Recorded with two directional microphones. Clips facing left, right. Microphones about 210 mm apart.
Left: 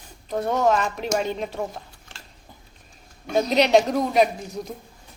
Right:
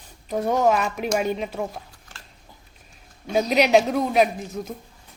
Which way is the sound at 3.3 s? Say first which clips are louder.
Even; 10° right (ahead or behind).